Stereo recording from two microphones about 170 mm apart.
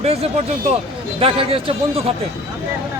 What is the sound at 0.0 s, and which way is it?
Speech, 35° right (ahead or behind).